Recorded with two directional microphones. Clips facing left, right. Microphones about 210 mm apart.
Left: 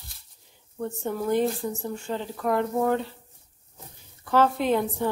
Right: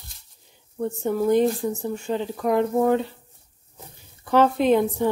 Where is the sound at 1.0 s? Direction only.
15° right (ahead or behind).